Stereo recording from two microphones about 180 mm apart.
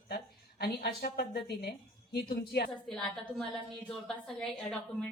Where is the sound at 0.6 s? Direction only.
60° left (ahead or behind).